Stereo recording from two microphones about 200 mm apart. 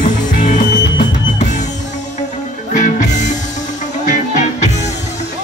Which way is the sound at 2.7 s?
45° left (ahead or behind).